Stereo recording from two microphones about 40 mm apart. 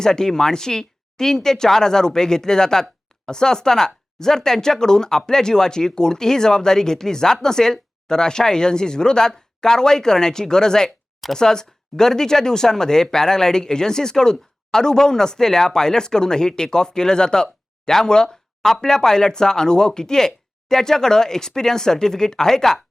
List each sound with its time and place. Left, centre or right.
0.0 s speech: centre